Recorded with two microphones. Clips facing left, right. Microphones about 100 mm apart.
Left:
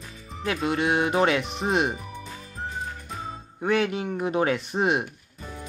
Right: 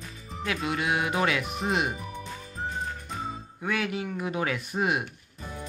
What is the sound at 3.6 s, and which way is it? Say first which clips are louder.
Speech: left 6 dB; 30° left (ahead or behind).